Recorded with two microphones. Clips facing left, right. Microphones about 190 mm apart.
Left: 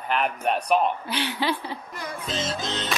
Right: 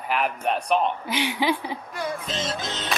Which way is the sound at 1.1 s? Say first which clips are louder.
Right 2 dB; 15° right (ahead or behind).